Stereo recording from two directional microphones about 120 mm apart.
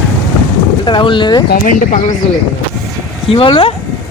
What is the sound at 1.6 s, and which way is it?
Speech, 90° left.